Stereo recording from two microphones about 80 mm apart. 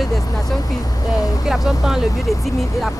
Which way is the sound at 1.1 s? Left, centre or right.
Left.